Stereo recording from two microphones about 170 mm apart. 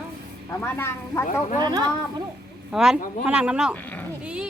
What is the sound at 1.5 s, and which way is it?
Speech, 25° right (ahead or behind).